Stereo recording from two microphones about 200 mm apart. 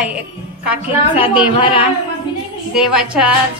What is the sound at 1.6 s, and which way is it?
Speech, 25° left (ahead or behind).